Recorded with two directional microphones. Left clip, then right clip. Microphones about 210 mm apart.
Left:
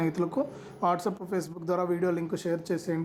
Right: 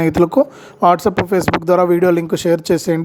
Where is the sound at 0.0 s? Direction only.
35° right (ahead or behind).